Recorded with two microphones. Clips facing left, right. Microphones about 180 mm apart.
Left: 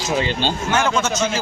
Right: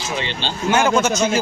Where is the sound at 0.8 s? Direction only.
10° right (ahead or behind).